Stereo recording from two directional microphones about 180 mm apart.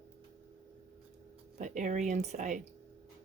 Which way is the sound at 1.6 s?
45° right (ahead or behind).